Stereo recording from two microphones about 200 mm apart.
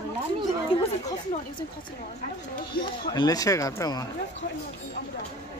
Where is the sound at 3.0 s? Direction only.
20° left (ahead or behind).